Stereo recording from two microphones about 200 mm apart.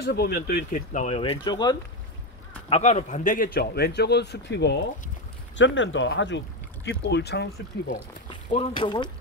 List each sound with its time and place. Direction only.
0.0 s speech: 55° left (ahead or behind); by 1.8 s 20° left (ahead or behind)
2.7 s a man's voice: 35° left (ahead or behind); by 7.4 s 55° left (ahead or behind)
8.3 s speech: 25° left (ahead or behind)